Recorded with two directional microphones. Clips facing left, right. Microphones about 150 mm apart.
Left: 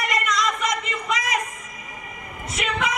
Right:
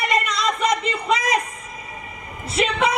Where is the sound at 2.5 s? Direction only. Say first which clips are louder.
Right 6 dB; 30° right (ahead or behind).